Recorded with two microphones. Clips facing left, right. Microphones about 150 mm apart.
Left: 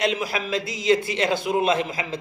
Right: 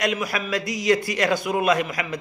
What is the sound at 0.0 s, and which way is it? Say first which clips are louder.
A man's voice: even; 25° left (ahead or behind).